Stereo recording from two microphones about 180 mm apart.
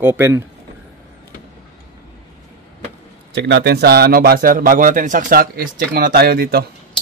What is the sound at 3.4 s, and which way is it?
Speech, 70° right (ahead or behind).